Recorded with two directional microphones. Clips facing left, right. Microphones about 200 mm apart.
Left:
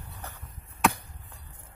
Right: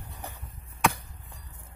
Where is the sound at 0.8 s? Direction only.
Centre (ahead or behind).